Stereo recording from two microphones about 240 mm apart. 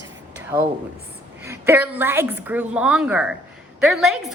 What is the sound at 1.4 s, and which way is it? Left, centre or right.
A woman's voice, centre.